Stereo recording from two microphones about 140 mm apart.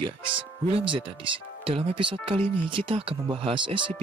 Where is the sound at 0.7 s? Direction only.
35° right (ahead or behind).